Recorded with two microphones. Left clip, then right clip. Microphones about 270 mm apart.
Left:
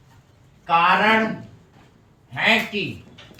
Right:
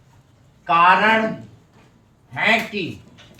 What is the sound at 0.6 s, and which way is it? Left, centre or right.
Speech, centre.